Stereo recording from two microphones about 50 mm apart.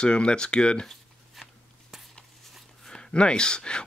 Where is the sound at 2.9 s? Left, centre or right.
Centre.